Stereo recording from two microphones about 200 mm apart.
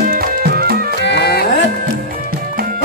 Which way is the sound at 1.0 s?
60° left (ahead or behind).